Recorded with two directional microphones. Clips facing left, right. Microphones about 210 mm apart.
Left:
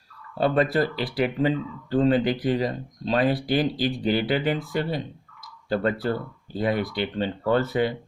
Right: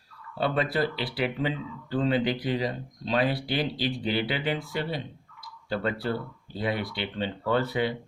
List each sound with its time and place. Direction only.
0.3 s speech: 45° left (ahead or behind)